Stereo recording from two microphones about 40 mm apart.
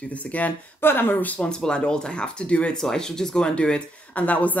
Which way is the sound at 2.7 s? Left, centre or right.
Centre.